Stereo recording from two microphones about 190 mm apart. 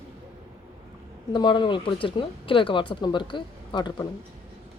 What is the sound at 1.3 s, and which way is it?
Speech, 25° left (ahead or behind).